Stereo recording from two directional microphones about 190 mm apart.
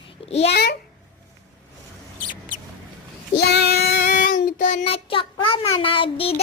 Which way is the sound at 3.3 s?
55° left (ahead or behind).